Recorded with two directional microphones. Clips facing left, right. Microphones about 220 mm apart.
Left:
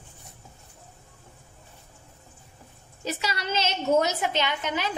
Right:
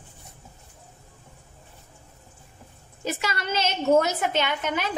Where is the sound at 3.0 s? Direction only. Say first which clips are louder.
Right 2 dB; 50° right (ahead or behind).